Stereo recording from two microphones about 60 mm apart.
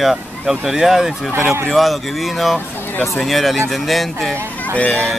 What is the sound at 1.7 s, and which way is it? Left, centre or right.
Speech, centre.